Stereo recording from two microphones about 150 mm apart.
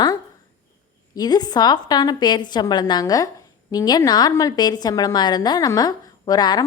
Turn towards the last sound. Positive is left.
turn(degrees=30)  # may be behind; listen again after turning